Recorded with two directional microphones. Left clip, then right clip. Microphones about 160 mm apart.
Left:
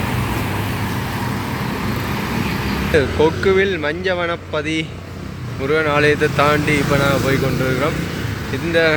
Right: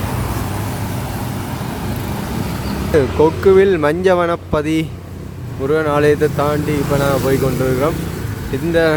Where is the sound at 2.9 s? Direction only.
35° right (ahead or behind).